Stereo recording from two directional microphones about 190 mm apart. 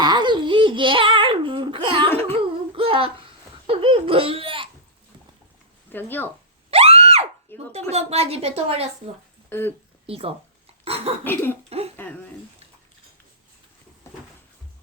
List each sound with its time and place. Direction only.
0.0 s babbling: 25° right (ahead or behind)
2.7 s child singing: 30° right (ahead or behind)
3.7 s laughter: 30° right (ahead or behind)
5.9 s speech: 10° left (ahead or behind)
6.7 s a sound: 30° right (ahead or behind)
7.7 s a woman's voice: 35° right (ahead or behind)
9.5 s speech: 10° left (ahead or behind)
10.1 s a woman's voice: 30° right (ahead or behind)
11.2 s speech: 10° left (ahead or behind)
14.0 s cupboard open or close: 15° left (ahead or behind)